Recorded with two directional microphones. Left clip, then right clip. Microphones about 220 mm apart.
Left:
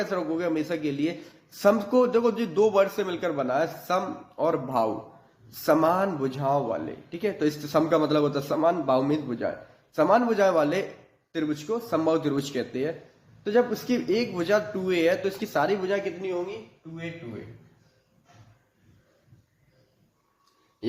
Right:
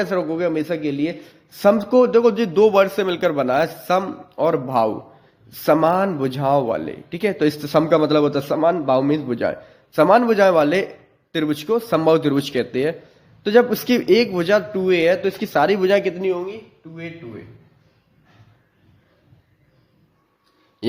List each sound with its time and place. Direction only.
0.0 s a man's voice: 30° right (ahead or behind)